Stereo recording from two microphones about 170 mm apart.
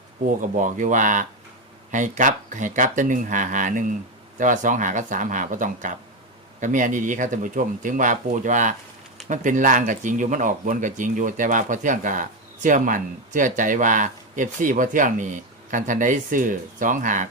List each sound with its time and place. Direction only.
0.6 s speech: 50° right (ahead or behind)